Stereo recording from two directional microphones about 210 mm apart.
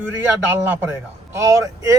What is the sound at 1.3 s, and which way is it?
Speech, 15° right (ahead or behind).